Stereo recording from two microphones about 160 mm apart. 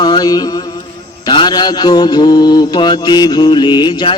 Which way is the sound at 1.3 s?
30° left (ahead or behind).